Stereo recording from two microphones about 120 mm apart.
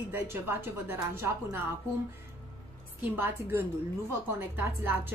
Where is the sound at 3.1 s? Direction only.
15° right (ahead or behind).